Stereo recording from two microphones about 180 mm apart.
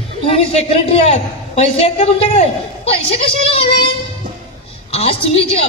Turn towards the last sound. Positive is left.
turn(degrees=35)  # may be behind; listen again after turning